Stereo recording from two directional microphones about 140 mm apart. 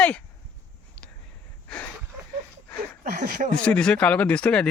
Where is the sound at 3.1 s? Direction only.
70° right (ahead or behind).